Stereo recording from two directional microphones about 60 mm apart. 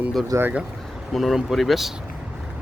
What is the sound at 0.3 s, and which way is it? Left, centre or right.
Speech, right.